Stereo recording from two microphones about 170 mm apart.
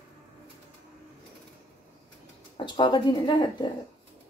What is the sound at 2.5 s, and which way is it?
Speech, 25° left (ahead or behind).